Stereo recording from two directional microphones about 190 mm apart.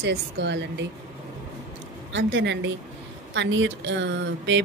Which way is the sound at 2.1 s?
70° right (ahead or behind).